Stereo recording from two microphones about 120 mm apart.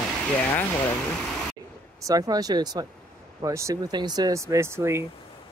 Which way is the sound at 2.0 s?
30° right (ahead or behind).